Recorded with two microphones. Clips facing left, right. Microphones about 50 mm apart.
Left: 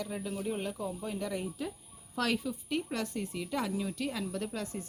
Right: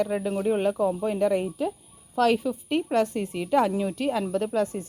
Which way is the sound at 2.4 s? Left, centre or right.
Right.